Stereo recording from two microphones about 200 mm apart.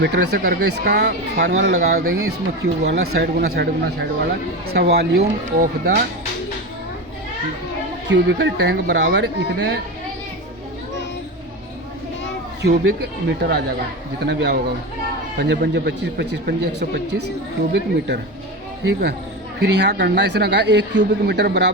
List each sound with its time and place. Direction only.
0.0 s speech: 55° right (ahead or behind)
8.1 s speech: 60° right (ahead or behind)
12.6 s speech: 55° right (ahead or behind)
18.9 s speech: 50° right (ahead or behind)